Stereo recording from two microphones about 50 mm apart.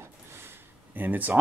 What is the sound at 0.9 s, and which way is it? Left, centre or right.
Speech, right.